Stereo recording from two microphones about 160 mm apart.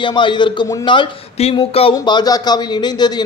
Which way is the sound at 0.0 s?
30° left (ahead or behind).